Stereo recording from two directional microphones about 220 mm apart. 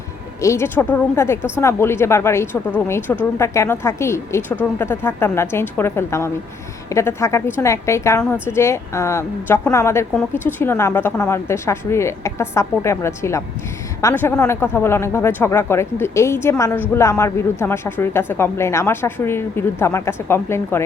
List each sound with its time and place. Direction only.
0.4 s a woman's voice: 10° left (ahead or behind)